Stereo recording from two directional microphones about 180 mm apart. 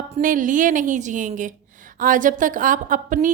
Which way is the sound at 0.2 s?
50° right (ahead or behind).